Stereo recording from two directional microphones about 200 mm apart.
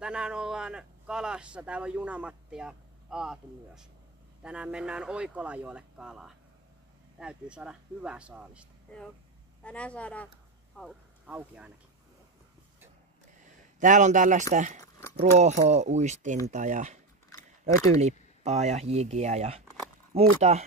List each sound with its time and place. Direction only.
0.0 s a man's voice: 5° right (ahead or behind)
10.8 s speech: 5° right (ahead or behind)
13.7 s speech: 40° right (ahead or behind)
14.8 s a sound: 15° left (ahead or behind)
15.1 s speech: 35° right (ahead or behind)